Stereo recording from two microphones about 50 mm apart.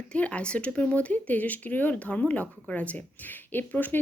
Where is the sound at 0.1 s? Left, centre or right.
Left.